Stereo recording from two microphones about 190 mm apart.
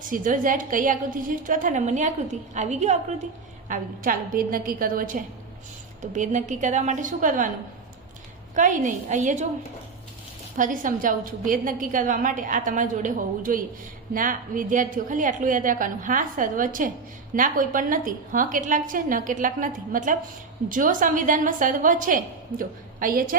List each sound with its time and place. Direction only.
0.1 s a woman's voice: 45° right (ahead or behind)
8.5 s a woman's voice: 40° right (ahead or behind)
10.6 s a woman's voice: 45° right (ahead or behind)